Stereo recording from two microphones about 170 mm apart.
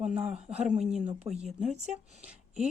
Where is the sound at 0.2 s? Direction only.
40° right (ahead or behind).